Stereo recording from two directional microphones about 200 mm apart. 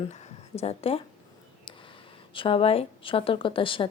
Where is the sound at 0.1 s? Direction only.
30° left (ahead or behind).